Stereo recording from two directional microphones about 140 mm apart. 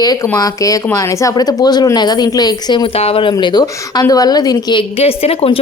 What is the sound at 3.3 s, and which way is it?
A woman's voice, 30° left (ahead or behind).